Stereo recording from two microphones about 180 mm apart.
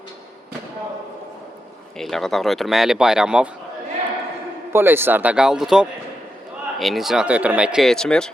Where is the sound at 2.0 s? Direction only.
Centre (ahead or behind).